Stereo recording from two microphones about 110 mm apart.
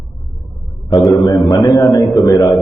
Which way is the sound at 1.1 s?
40° left (ahead or behind).